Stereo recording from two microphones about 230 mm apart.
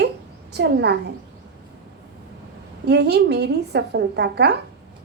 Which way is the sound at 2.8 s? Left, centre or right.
Right.